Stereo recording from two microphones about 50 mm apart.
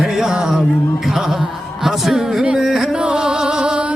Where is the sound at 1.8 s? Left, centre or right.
Centre.